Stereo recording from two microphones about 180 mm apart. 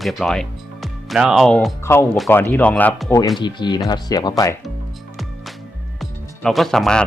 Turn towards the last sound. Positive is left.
turn(degrees=5)  # may be behind; listen again after turning